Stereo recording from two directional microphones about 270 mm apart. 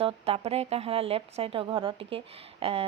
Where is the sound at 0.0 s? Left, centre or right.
Right.